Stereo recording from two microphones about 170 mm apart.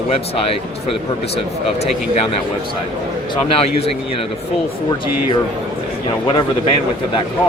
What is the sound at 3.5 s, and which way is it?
Speech, 35° left (ahead or behind).